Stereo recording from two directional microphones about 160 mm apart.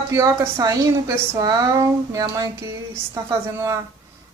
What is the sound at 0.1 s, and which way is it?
Speech, 20° right (ahead or behind).